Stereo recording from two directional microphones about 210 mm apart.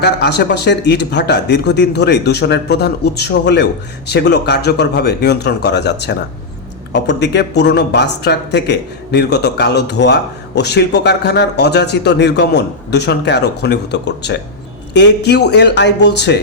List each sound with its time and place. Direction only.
0.0 s speech: 50° left (ahead or behind)